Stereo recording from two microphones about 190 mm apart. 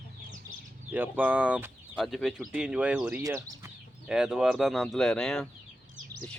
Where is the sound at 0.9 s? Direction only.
10° right (ahead or behind).